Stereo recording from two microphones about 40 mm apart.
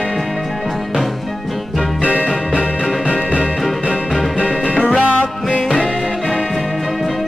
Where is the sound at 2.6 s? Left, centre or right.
Left.